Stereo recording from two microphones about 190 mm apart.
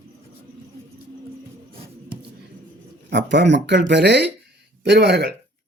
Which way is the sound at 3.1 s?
70° right (ahead or behind).